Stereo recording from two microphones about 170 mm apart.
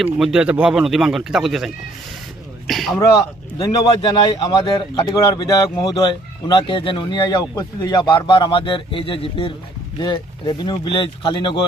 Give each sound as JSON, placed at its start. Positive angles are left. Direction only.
{"t": 0.0, "sound": "speech", "side_deg": 0}
{"t": 2.6, "sound": "a sound", "side_deg": 0}
{"t": 3.0, "sound": "speech", "side_deg": 20}